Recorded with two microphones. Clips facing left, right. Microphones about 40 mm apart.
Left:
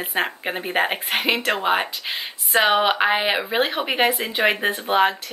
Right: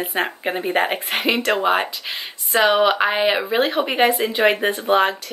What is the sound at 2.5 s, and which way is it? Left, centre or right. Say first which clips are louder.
Speech: right 2 dB; centre.